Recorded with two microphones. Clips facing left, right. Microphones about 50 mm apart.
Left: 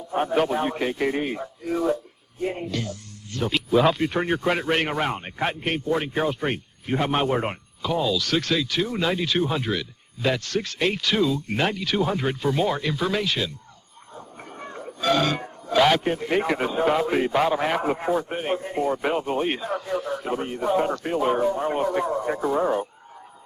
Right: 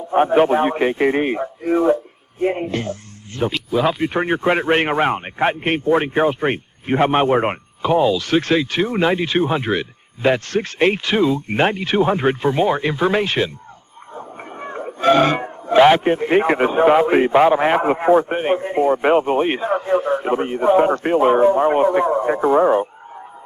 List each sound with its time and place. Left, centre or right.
0.1 s a man's voice: right
3.5 s speech: centre
4.1 s speech: right